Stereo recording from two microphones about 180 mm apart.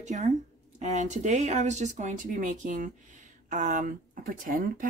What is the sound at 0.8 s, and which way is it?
Speech, 40° right (ahead or behind).